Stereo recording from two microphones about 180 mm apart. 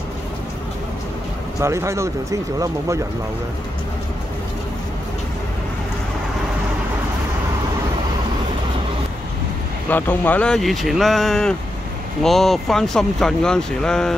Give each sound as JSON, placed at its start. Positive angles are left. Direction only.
{"t": 1.6, "sound": "speech", "side_deg": -15}
{"t": 9.8, "sound": "speech", "side_deg": 10}